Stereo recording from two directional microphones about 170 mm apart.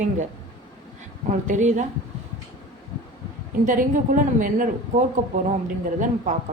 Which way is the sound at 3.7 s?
50° right (ahead or behind).